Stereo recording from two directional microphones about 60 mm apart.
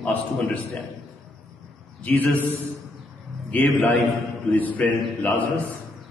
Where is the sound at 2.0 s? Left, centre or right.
Left.